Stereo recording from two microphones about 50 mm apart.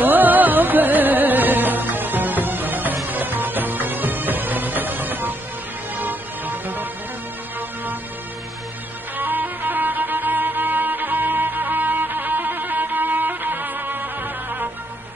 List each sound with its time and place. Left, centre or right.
0.0 s music: right
9.1 s music: right